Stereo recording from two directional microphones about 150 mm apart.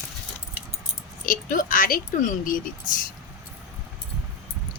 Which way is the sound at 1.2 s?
65° left (ahead or behind).